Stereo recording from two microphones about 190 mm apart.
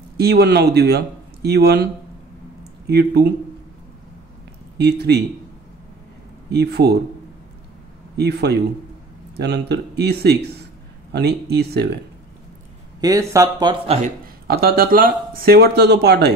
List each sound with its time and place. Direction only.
0.2 s speech: 55° right (ahead or behind)
2.9 s speech: 60° right (ahead or behind)
4.7 s speech: 60° right (ahead or behind)
6.5 s speech: 60° right (ahead or behind)
8.2 s speech: 60° right (ahead or behind)
13.0 s speech: 15° right (ahead or behind)
13.8 s speech: 45° right (ahead or behind)